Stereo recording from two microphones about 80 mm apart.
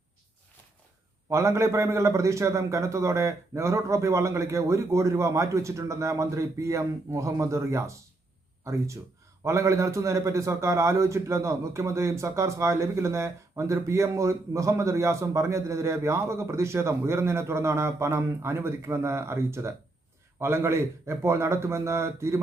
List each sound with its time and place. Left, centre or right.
1.3 s a man's voice: right